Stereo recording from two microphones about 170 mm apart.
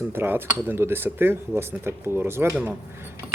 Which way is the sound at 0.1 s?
15° right (ahead or behind).